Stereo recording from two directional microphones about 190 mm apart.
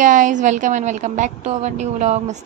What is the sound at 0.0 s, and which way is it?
A woman's voice, 40° right (ahead or behind).